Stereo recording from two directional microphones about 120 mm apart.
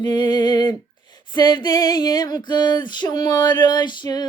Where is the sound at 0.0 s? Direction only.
35° left (ahead or behind).